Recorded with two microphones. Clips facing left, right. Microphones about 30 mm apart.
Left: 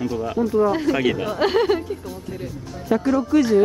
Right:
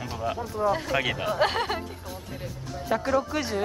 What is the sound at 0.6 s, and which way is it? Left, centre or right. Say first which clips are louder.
Speech: left 1 dB; centre.